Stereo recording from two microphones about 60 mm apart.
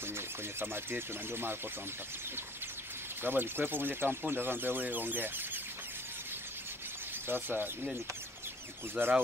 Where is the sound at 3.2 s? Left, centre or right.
Right.